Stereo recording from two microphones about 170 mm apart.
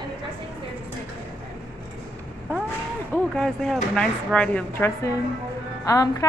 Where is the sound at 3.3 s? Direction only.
Centre (ahead or behind); by 6.2 s 20° left (ahead or behind).